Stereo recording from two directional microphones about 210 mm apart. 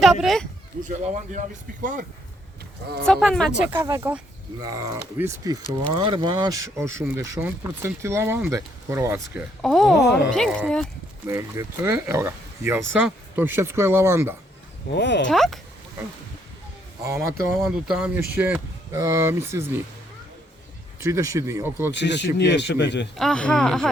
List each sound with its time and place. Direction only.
0.0 s speech: centre (ahead or behind)
0.8 s speech: 35° right (ahead or behind)
3.0 s speech: centre (ahead or behind)
3.6 s speech: 10° right (ahead or behind)
9.6 s speech: centre (ahead or behind)
11.3 s speech: 15° right (ahead or behind)
14.8 s a man's voice: 55° left (ahead or behind)
15.3 s speech: centre (ahead or behind)
17.0 s speech: 15° right (ahead or behind)
17.6 s speech: 5° right (ahead or behind)
21.0 s speech: 15° right (ahead or behind)
21.9 s a man's voice: 55° left (ahead or behind)
23.1 s speech: 5° left (ahead or behind)